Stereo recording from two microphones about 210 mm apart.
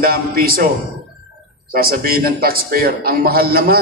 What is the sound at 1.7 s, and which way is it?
A man's voice, 45° right (ahead or behind).